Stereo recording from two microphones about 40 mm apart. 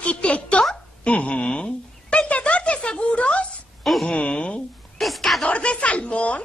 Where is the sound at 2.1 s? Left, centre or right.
Left.